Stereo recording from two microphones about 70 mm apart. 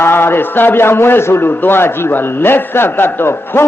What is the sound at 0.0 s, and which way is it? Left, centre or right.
A man's voice, left.